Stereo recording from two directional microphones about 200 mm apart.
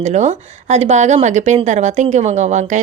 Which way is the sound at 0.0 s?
35° right (ahead or behind).